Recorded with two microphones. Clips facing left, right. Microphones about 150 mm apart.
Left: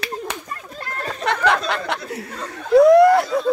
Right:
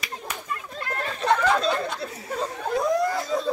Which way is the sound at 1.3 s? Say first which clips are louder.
Left 1 dB; 80° left.